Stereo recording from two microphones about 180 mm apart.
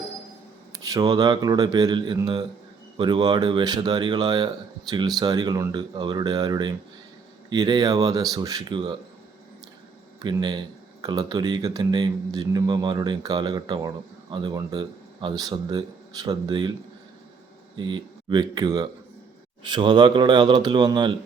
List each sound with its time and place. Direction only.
0.7 s speech: 20° right (ahead or behind)
10.2 s speech: 25° right (ahead or behind)
17.7 s speech: 25° right (ahead or behind)